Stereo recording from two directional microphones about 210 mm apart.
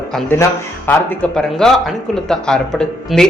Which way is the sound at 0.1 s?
5° left (ahead or behind).